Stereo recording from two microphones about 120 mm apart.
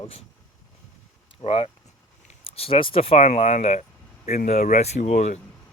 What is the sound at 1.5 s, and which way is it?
Speech, 55° left (ahead or behind).